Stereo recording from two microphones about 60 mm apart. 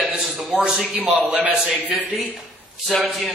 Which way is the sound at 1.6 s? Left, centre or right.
Centre.